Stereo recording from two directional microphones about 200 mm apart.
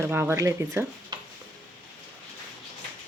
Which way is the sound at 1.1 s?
20° right (ahead or behind).